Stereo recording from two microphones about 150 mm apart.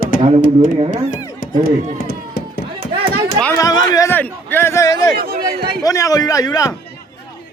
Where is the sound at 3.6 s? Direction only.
25° left (ahead or behind).